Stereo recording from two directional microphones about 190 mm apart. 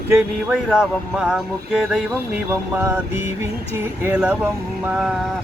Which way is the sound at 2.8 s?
15° right (ahead or behind).